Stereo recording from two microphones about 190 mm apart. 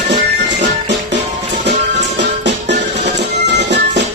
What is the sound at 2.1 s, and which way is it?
Music, 65° right (ahead or behind).